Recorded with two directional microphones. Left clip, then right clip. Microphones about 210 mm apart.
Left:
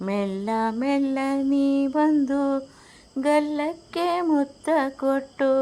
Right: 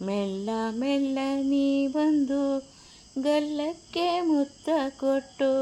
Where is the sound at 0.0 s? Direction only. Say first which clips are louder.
Left 3 dB; 10° left (ahead or behind).